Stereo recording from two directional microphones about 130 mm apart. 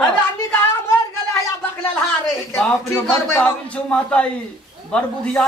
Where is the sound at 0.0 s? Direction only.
15° left (ahead or behind).